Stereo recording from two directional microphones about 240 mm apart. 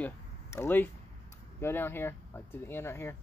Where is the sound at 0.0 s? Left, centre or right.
Centre.